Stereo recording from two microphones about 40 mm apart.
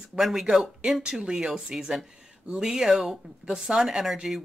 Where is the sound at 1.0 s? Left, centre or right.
Centre.